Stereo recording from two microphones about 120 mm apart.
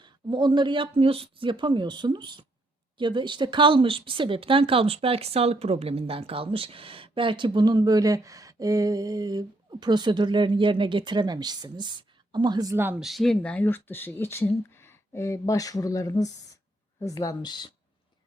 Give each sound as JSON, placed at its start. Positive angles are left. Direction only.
{"t": 0.0, "sound": "speech", "side_deg": -40}
{"t": 12.7, "sound": "speech", "side_deg": -20}
{"t": 13.0, "sound": "speech", "side_deg": 0}